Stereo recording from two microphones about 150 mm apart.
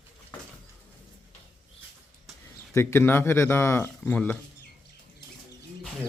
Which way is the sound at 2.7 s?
15° left (ahead or behind).